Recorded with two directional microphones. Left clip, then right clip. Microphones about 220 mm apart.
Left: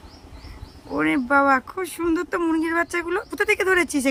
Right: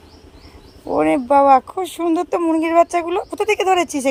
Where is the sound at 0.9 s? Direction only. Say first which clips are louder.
Right 5 dB; 55° right (ahead or behind).